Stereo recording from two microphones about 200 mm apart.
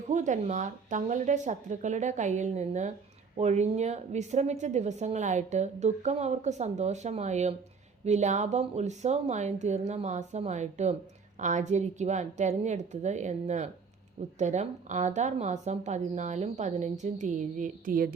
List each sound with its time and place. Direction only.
0.1 s a woman's voice: 35° right (ahead or behind)